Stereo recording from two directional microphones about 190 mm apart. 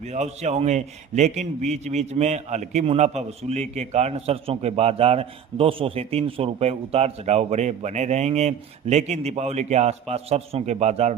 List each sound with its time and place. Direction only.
0.0 s a man's voice: 35° right (ahead or behind)